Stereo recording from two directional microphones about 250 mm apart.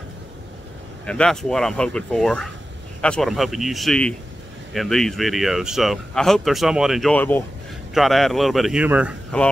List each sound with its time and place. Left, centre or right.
1.0 s speech: centre